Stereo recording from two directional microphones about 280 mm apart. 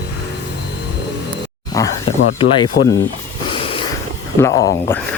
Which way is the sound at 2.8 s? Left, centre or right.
Left.